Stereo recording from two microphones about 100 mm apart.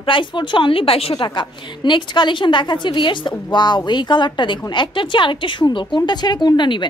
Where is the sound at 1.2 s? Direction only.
50° left (ahead or behind).